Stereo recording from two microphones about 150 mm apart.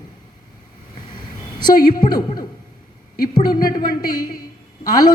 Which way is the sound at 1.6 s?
30° left (ahead or behind).